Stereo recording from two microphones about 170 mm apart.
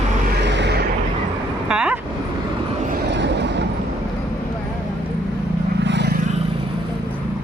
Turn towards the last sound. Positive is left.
turn(degrees=-85)